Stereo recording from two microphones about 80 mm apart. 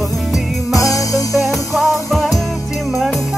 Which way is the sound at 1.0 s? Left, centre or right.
Left.